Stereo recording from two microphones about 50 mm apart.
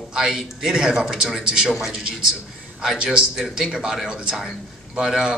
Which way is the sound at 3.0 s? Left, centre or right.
Centre.